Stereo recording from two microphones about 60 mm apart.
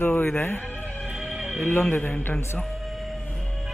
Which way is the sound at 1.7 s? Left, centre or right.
Left.